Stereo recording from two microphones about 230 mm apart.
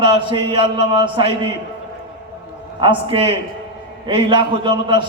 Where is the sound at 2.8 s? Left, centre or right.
Right.